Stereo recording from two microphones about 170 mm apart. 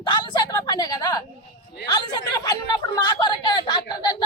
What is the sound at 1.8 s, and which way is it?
Speech, 25° left (ahead or behind).